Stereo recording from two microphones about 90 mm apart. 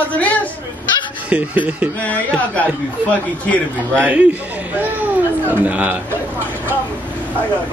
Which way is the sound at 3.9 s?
15° right (ahead or behind).